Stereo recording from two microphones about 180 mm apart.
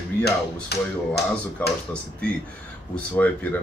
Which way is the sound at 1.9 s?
5° left (ahead or behind).